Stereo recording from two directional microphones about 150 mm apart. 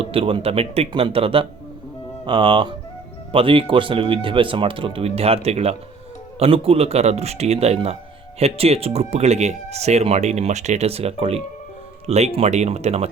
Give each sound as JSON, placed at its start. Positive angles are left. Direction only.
{"t": 0.0, "sound": "speech", "side_deg": -35}